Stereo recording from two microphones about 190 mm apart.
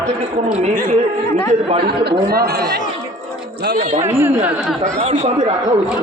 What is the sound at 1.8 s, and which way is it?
Speech, 60° right (ahead or behind).